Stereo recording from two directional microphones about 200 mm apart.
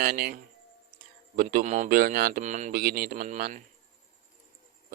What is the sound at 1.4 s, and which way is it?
A man's voice, 45° right (ahead or behind).